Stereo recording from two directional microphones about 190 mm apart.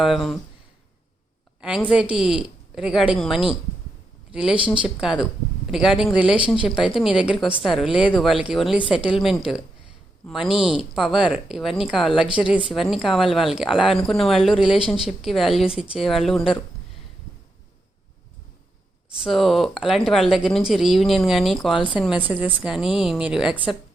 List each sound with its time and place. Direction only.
0.0 s speech: centre (ahead or behind)
1.9 s speech: 5° right (ahead or behind)
4.5 s speech: 25° right (ahead or behind)
4.9 s speech: 5° right (ahead or behind)
19.2 s speech: centre (ahead or behind)
21.7 s a woman's voice: 25° left (ahead or behind)
21.9 s speech: 5° right (ahead or behind)